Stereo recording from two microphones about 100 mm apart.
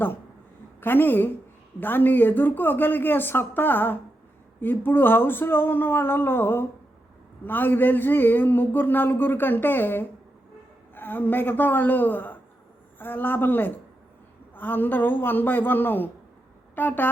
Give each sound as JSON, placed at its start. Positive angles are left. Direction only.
{"t": 0.8, "sound": "speech", "side_deg": 20}